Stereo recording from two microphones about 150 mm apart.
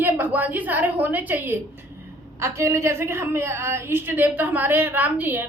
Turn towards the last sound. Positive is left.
turn(degrees=-15)  # may be behind; listen again after turning